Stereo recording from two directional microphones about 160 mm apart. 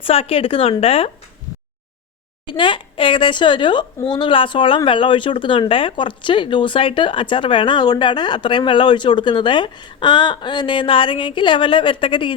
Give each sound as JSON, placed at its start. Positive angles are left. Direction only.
{"t": 0.0, "sound": "speech", "side_deg": 35}
{"t": 2.6, "sound": "speech", "side_deg": 30}